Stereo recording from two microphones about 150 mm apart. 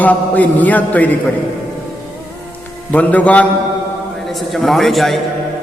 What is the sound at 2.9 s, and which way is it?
A man's voice, 10° left (ahead or behind).